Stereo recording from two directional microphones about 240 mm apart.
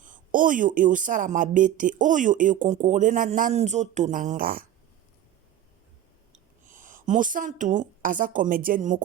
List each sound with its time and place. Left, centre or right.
0.0 s speech: right
6.7 s a woman's voice: right